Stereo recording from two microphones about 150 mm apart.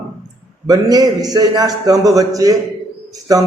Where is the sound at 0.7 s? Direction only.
25° right (ahead or behind).